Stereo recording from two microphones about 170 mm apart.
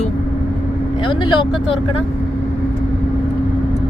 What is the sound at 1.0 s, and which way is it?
Speech, 30° left (ahead or behind).